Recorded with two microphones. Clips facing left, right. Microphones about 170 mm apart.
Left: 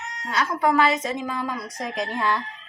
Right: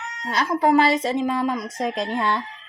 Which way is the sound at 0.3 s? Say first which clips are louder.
Right 3 dB; 30° right (ahead or behind).